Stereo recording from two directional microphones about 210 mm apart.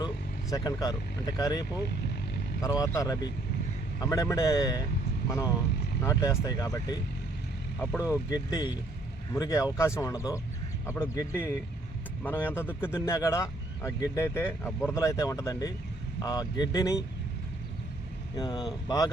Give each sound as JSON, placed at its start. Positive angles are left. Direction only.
{"t": 0.5, "sound": "speech", "side_deg": 20}
{"t": 6.0, "sound": "speech", "side_deg": 15}
{"t": 18.3, "sound": "speech", "side_deg": 20}